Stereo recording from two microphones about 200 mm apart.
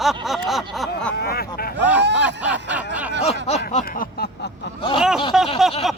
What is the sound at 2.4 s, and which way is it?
Snicker, 65° right (ahead or behind).